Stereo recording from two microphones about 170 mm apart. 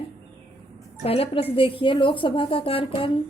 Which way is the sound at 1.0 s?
35° left (ahead or behind).